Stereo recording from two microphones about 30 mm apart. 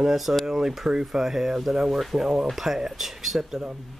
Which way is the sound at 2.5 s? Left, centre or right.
Centre.